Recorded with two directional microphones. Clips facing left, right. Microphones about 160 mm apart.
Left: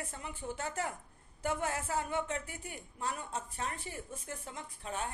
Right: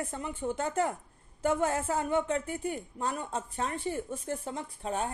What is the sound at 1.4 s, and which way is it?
A woman's voice, 30° right (ahead or behind).